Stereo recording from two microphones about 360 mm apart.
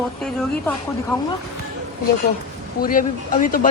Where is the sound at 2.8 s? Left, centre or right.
Left.